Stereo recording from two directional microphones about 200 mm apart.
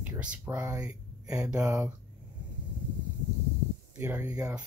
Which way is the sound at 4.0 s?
10° right (ahead or behind).